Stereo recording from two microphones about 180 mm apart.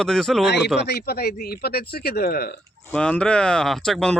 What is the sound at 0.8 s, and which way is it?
Speech, 65° left (ahead or behind).